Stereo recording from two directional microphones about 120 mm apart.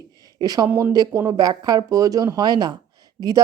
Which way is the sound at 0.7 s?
15° right (ahead or behind).